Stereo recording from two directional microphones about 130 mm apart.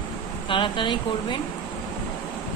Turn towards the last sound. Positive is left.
turn(degrees=35)  # may be behind; listen again after turning